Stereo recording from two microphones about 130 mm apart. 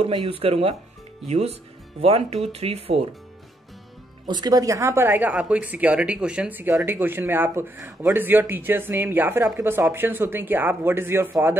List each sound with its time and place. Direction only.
0.0 s speech: 40° right (ahead or behind)
4.3 s speech: 30° right (ahead or behind)